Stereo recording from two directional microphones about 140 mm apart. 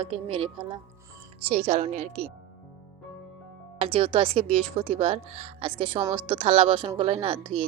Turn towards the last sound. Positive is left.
turn(degrees=-40)  # may be behind; listen again after turning